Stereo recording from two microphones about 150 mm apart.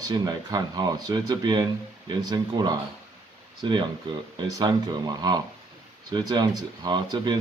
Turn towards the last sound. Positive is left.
turn(degrees=-30)  # may be behind; listen again after turning